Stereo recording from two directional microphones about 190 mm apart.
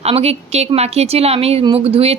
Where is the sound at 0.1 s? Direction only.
35° right (ahead or behind).